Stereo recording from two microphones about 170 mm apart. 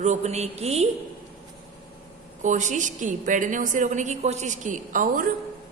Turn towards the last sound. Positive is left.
turn(degrees=-55)  # may be behind; listen again after turning